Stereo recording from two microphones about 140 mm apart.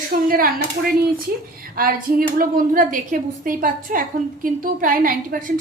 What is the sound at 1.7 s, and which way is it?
A woman's voice, 90° right.